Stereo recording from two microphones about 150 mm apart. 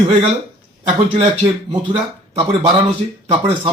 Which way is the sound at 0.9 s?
40° right (ahead or behind).